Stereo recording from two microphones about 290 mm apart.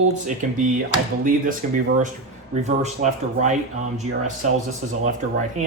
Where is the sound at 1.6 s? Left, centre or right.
Right.